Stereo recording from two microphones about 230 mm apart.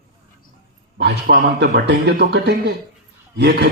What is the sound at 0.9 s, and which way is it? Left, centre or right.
A man's voice, right.